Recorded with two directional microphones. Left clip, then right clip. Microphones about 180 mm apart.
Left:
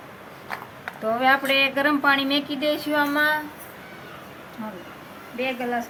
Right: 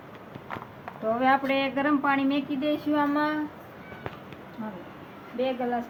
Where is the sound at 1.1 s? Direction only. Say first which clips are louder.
Left 4 dB; 20° left (ahead or behind).